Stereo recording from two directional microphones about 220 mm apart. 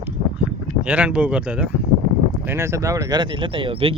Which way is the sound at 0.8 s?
5° right (ahead or behind).